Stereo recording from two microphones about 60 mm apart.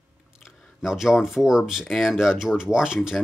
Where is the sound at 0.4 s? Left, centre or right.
Centre.